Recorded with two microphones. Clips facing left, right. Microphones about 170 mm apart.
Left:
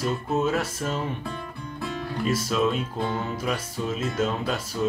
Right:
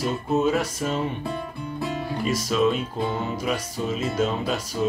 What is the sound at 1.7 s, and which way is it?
Music, 15° right (ahead or behind).